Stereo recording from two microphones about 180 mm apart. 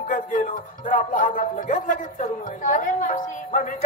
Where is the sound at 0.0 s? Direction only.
50° left (ahead or behind).